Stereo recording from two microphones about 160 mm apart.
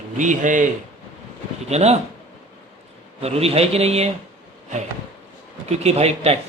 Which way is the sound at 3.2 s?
40° right (ahead or behind).